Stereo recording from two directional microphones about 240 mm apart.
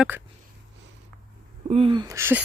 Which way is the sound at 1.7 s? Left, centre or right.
Right.